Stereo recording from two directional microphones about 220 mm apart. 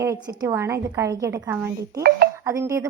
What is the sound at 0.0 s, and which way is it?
A woman's voice, 15° right (ahead or behind).